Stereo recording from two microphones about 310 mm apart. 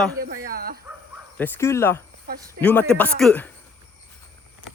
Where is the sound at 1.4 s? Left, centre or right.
Centre.